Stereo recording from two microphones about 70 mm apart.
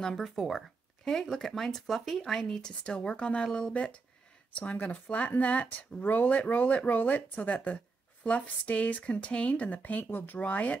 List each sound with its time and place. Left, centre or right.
0.0 s speech: centre